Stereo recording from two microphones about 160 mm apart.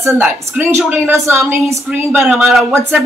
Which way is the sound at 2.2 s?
Centre (ahead or behind).